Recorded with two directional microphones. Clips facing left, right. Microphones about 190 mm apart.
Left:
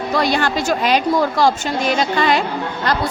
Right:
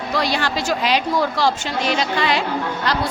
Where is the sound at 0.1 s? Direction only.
50° left (ahead or behind).